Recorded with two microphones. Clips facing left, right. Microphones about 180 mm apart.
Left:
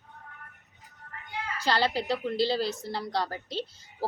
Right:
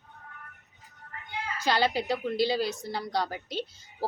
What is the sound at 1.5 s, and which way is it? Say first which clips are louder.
A woman's voice: right 1 dB; 15° right (ahead or behind).